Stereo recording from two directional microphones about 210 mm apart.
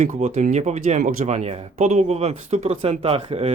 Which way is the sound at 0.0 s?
35° right (ahead or behind).